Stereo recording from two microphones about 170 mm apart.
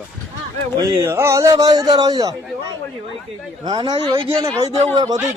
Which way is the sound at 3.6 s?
25° right (ahead or behind).